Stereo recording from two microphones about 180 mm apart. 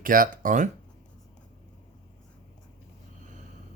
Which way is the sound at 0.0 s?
50° right (ahead or behind).